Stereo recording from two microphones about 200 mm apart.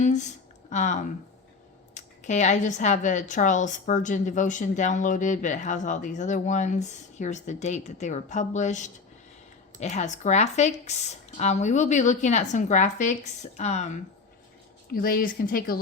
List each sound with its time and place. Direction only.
0.0 s a sound: 35° left (ahead or behind)
2.0 s a woman's voice: 35° left (ahead or behind)
14.9 s speech: 45° left (ahead or behind)